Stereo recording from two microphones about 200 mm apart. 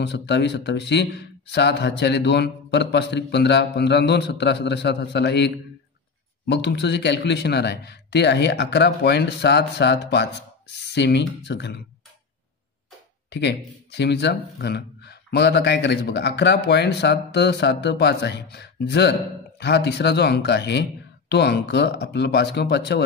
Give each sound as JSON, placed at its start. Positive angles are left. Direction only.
{"t": 0.0, "sound": "speech", "side_deg": 60}
{"t": 13.3, "sound": "speech", "side_deg": 60}